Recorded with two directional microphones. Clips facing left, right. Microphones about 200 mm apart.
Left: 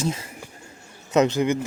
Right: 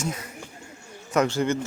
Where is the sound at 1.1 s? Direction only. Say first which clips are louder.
Left 3 dB; 15° left (ahead or behind).